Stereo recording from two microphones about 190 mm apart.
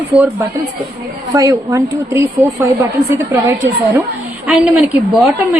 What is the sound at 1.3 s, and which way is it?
Speech, 15° right (ahead or behind).